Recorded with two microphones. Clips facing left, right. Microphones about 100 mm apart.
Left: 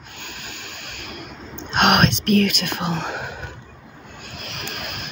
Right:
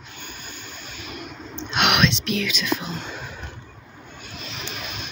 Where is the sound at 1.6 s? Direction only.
45° left (ahead or behind); by 3.3 s 65° left (ahead or behind).